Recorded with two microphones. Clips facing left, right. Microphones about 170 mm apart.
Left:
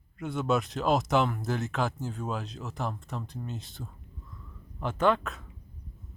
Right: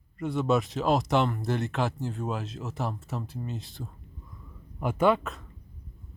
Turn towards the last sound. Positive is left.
turn(degrees=-5)  # may be behind; listen again after turning